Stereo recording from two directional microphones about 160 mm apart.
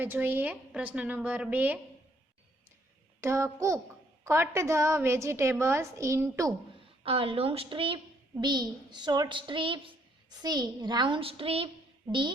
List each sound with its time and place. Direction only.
0.0 s a woman's voice: 10° right (ahead or behind)
3.2 s a woman's voice: 20° right (ahead or behind)
7.0 s a woman's voice: 35° right (ahead or behind)